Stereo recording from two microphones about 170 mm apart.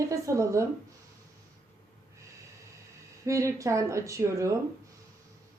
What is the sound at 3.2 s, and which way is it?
Speech, 20° right (ahead or behind).